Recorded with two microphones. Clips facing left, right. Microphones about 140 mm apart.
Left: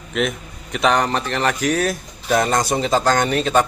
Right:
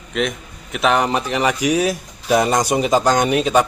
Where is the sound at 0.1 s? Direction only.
Centre (ahead or behind).